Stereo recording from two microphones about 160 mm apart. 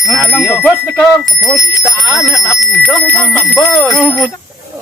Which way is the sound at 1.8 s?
20° left (ahead or behind).